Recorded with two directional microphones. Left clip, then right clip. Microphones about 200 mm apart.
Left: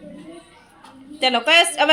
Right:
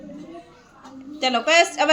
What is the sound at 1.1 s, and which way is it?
Speech, 10° left (ahead or behind).